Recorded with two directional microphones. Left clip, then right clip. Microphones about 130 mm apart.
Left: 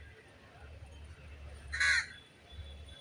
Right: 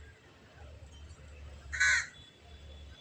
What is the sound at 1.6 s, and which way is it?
Crow, 30° left (ahead or behind).